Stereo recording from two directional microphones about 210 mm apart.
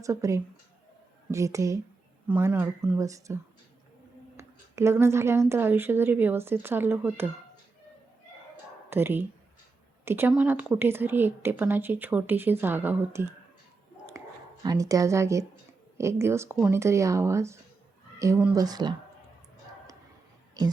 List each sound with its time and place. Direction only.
0.0 s speech: 15° right (ahead or behind)
4.4 s speech: 15° right (ahead or behind)
8.9 s speech: 10° right (ahead or behind)
14.6 s speech: 15° right (ahead or behind)
20.6 s speech: 20° right (ahead or behind)